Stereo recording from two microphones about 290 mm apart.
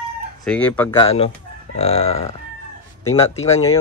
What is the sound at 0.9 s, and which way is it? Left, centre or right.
Speech, centre.